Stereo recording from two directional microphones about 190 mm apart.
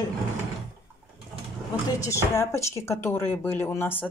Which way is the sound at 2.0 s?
15° left (ahead or behind).